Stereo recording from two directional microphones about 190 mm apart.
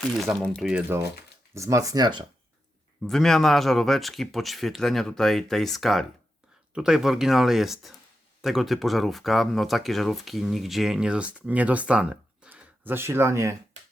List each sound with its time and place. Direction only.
0.2 s speech: centre (ahead or behind)
1.5 s speech: 15° right (ahead or behind)
3.0 s speech: centre (ahead or behind); by 13.6 s 15° right (ahead or behind)